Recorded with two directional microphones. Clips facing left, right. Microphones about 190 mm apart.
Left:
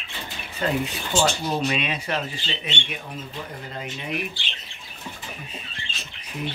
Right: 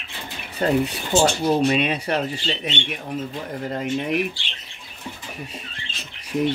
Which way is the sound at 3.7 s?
50° right (ahead or behind).